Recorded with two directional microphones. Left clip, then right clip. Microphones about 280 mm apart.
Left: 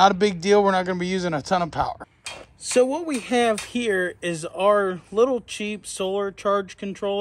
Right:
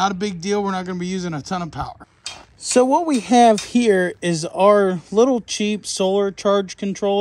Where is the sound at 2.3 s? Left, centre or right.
Left.